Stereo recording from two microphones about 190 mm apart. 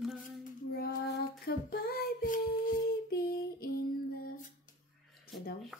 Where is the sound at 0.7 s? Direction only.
60° left (ahead or behind).